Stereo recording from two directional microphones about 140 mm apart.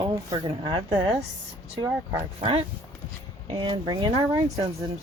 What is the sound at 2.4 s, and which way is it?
Speech, 45° right (ahead or behind).